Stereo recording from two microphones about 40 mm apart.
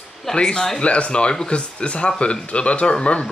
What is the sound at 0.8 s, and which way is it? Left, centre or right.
Speech, left.